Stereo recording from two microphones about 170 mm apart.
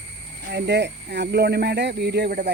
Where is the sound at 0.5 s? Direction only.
85° right.